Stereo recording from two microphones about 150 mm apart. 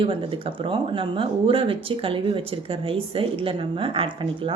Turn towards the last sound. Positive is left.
turn(degrees=-35)  # may be behind; listen again after turning